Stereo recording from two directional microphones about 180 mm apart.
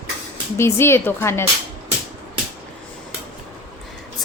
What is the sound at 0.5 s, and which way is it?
Speech, 15° left (ahead or behind).